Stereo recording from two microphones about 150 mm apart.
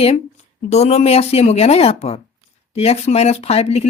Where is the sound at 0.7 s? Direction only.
45° left (ahead or behind).